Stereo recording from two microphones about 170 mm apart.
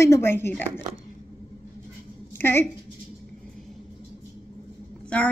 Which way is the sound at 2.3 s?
15° left (ahead or behind).